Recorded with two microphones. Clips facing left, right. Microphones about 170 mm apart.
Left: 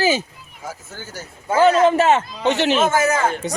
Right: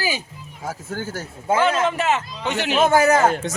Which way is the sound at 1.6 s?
35° left (ahead or behind).